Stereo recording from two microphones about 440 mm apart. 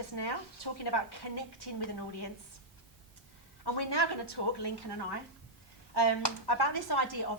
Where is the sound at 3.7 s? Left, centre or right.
Left.